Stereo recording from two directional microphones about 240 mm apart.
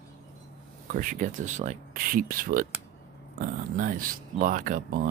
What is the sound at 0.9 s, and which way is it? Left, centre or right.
Speech, right.